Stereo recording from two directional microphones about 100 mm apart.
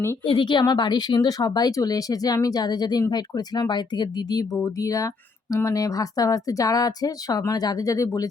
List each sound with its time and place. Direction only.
0.3 s a woman's voice: 55° left (ahead or behind)
0.6 s speech: 45° left (ahead or behind)